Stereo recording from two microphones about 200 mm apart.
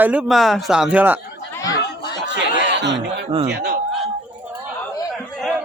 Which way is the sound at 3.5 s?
55° right (ahead or behind).